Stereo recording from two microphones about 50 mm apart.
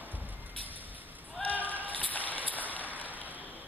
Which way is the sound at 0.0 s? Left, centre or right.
Right.